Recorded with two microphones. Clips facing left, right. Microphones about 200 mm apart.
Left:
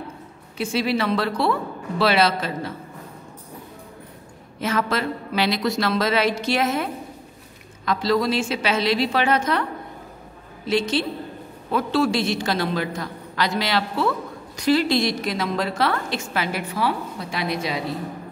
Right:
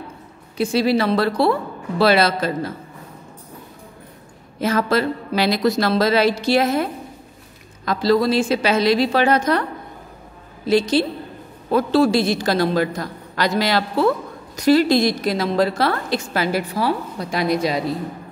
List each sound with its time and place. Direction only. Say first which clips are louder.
0.6 s a woman's voice: right 5 dB; 35° right (ahead or behind)
4.6 s a woman's voice: right 5 dB; 35° right (ahead or behind)
10.7 s a woman's voice: right 5 dB; 35° right (ahead or behind)